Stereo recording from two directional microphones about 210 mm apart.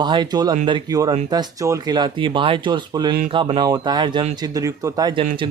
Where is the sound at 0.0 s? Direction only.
20° right (ahead or behind).